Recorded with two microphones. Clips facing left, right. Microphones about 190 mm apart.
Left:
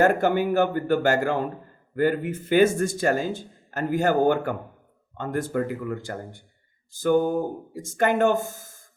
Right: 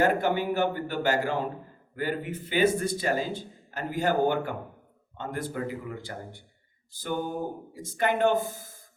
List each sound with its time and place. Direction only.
0.0 s speech: 45° left (ahead or behind)